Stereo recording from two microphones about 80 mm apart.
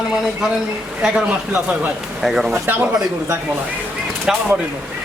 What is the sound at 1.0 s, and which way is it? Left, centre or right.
A man's voice, centre.